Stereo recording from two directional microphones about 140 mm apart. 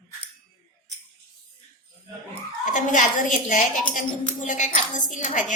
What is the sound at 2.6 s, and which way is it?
A woman's voice, 65° left (ahead or behind).